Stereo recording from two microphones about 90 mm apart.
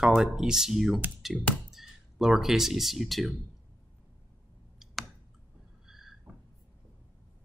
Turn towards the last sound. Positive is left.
turn(degrees=-5)  # may be behind; listen again after turning